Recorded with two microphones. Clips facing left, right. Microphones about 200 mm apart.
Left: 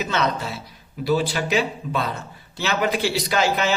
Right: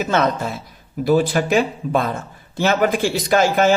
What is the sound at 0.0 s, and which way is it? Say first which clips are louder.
A man's voice: right 5 dB; 50° right (ahead or behind).